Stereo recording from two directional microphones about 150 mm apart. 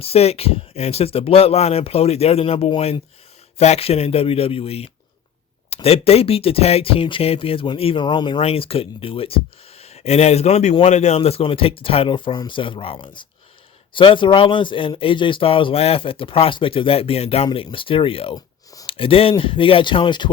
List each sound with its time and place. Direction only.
0.0 s speech: 45° left (ahead or behind)